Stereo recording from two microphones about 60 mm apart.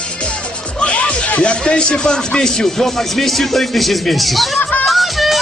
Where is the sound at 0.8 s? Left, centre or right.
Centre.